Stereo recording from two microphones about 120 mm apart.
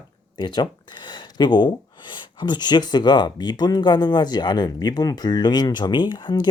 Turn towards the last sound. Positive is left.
turn(degrees=40)  # may be behind; listen again after turning